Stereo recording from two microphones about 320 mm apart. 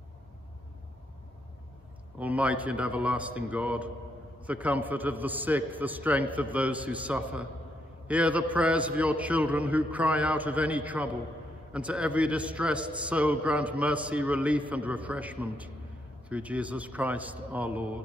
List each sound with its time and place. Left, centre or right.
2.1 s a man's voice: centre